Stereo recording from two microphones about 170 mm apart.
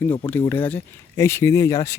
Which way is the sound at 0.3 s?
10° left (ahead or behind).